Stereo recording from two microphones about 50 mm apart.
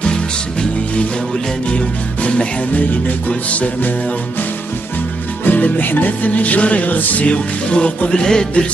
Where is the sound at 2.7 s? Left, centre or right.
Left.